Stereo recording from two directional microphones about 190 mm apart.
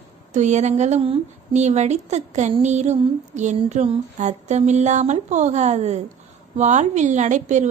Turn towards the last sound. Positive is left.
turn(degrees=-40)  # may be behind; listen again after turning